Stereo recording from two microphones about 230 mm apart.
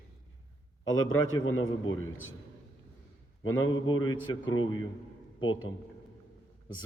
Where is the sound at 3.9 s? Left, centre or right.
Centre.